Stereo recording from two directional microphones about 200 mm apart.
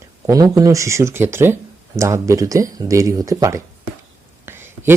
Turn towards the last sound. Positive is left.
turn(degrees=-10)  # may be behind; listen again after turning